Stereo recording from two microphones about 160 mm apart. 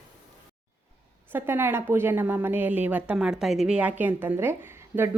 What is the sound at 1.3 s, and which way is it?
A woman's voice, 15° right (ahead or behind).